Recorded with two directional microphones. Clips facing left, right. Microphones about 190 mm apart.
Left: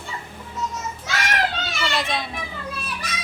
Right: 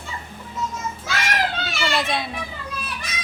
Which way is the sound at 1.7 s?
Centre (ahead or behind).